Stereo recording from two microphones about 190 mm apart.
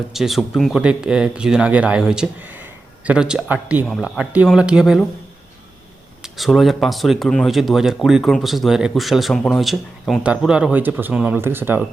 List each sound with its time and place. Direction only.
0.1 s speech: centre (ahead or behind)
6.2 s speech: centre (ahead or behind)